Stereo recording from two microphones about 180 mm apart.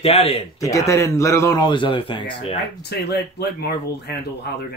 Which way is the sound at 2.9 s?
65° left (ahead or behind).